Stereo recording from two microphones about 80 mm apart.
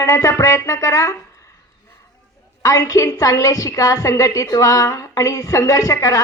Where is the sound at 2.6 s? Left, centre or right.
Left.